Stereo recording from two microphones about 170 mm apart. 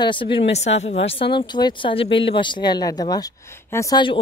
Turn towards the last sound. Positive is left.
turn(degrees=15)  # may be behind; listen again after turning